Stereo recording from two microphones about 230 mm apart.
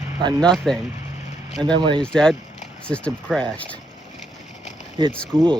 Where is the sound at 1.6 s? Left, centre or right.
Centre.